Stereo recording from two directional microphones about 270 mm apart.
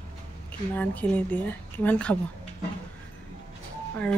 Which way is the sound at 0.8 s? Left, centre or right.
Centre.